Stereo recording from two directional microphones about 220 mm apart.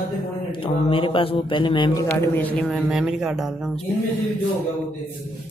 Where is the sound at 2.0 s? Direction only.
10° left (ahead or behind).